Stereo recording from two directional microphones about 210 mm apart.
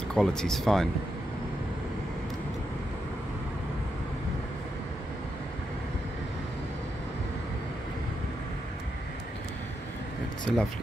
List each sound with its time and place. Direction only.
0.1 s speech: 5° left (ahead or behind)
10.5 s speech: centre (ahead or behind)